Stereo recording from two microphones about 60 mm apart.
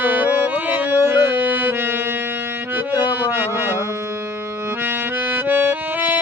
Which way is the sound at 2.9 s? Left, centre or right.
Right.